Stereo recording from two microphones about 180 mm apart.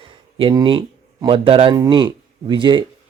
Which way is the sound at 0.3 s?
25° right (ahead or behind).